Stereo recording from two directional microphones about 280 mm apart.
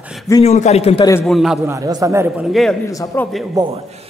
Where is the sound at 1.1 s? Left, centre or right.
Centre.